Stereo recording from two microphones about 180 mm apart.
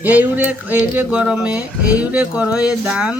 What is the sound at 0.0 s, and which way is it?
Speech, 10° right (ahead or behind).